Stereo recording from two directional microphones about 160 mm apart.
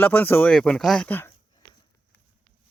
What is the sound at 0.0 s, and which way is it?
Speech, 10° left (ahead or behind).